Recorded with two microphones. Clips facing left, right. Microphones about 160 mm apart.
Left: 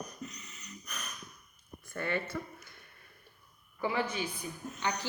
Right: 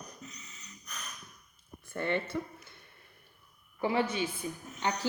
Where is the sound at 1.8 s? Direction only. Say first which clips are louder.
Right 2 dB; 25° right (ahead or behind).